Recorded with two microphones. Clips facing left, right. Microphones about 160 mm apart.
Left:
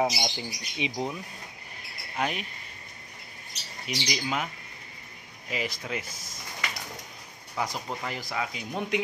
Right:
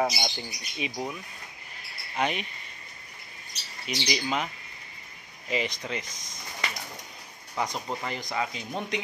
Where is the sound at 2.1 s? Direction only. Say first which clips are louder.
Right 2 dB; 5° left (ahead or behind).